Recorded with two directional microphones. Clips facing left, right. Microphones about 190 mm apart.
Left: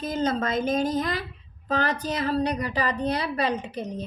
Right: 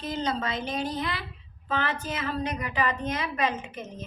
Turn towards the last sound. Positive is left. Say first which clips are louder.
# left 7 dB
turn(degrees=35)  # may be behind; listen again after turning